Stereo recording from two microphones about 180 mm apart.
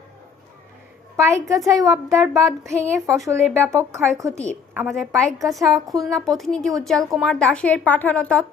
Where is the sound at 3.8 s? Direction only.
15° right (ahead or behind).